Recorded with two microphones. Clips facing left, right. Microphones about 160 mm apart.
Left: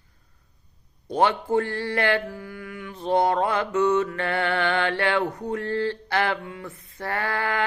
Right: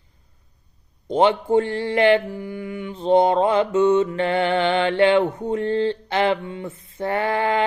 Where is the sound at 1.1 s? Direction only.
20° right (ahead or behind).